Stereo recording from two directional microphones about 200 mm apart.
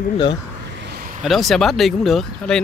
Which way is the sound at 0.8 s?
45° right (ahead or behind).